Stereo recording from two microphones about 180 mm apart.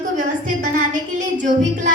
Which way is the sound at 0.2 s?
45° right (ahead or behind).